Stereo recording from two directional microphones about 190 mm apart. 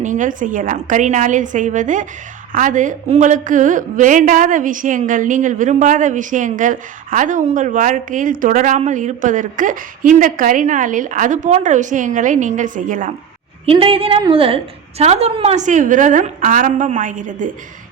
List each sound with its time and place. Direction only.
0.0 s a woman's voice: 40° right (ahead or behind)
13.7 s a woman's voice: 30° right (ahead or behind)